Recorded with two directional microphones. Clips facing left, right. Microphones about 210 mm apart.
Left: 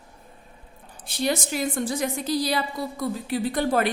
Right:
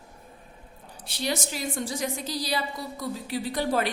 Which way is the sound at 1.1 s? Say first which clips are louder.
Left 5 dB; 50° left (ahead or behind).